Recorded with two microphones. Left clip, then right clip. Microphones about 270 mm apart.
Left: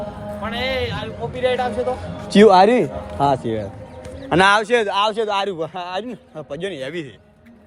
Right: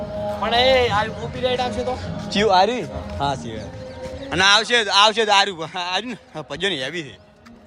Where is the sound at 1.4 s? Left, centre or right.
Left.